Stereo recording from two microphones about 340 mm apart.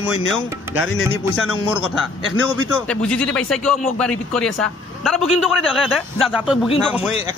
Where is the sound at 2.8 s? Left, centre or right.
Centre.